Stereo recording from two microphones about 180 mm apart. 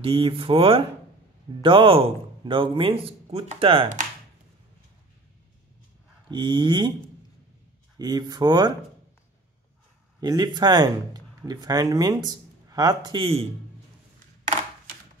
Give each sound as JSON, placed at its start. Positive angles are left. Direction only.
{"t": 0.0, "sound": "speech", "side_deg": -30}
{"t": 6.3, "sound": "speech", "side_deg": -25}
{"t": 8.0, "sound": "speech", "side_deg": -20}
{"t": 10.2, "sound": "speech", "side_deg": -25}